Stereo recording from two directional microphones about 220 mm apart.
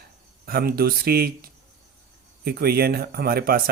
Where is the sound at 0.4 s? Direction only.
45° right (ahead or behind).